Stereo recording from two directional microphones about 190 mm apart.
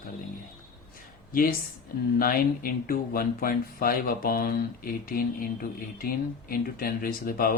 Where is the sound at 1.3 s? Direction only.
50° left (ahead or behind).